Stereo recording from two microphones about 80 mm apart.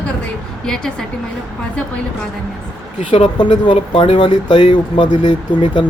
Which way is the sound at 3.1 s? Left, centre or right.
Left.